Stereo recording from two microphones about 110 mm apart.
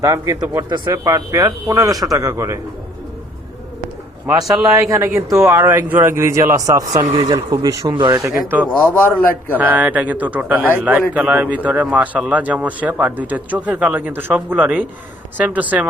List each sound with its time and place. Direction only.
0.0 s speech: 30° right (ahead or behind)
4.8 s speech: 25° right (ahead or behind); by 8.2 s 40° right (ahead or behind)
8.2 s speech: 25° right (ahead or behind)
9.0 s a man's voice: 15° left (ahead or behind)
9.6 s a man's voice: 15° right (ahead or behind)